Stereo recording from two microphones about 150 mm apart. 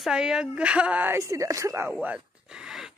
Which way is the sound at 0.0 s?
5° right (ahead or behind).